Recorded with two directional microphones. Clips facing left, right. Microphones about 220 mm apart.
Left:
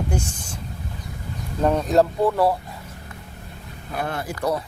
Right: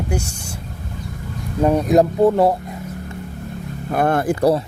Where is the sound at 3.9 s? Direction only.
50° right (ahead or behind).